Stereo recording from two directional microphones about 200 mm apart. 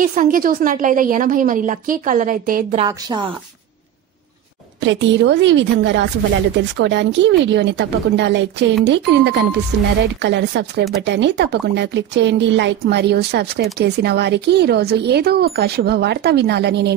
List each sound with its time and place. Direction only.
0.0 s a woman's voice: 40° right (ahead or behind)
2.9 s a woman's voice: 20° right (ahead or behind)
4.8 s speech: 65° right (ahead or behind)